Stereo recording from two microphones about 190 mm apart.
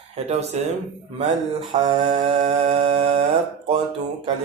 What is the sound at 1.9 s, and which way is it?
Mantra, 30° right (ahead or behind).